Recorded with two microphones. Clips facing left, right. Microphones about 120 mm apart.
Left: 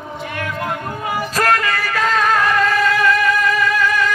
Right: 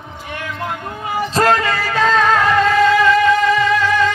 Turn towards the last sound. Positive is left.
turn(degrees=-25)  # may be behind; listen again after turning